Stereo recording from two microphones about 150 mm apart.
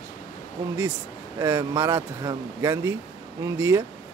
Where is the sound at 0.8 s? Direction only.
15° right (ahead or behind).